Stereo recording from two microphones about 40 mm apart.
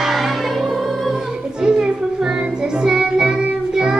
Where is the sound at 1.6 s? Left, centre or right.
Right.